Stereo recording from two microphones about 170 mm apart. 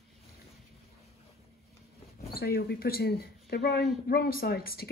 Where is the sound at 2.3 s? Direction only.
65° left (ahead or behind).